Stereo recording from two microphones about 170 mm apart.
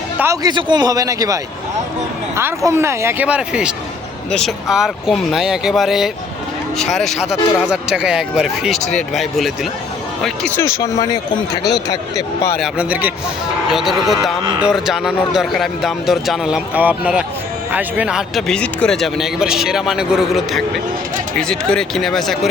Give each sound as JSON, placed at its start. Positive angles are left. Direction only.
{"t": 0.2, "sound": "speech", "side_deg": -15}
{"t": 2.6, "sound": "speech", "side_deg": -15}
{"t": 10.5, "sound": "speech", "side_deg": 15}
{"t": 12.5, "sound": "speech", "side_deg": -5}